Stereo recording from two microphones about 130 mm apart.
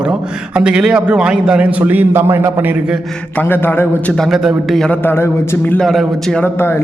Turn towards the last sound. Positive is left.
turn(degrees=20)  # may be behind; listen again after turning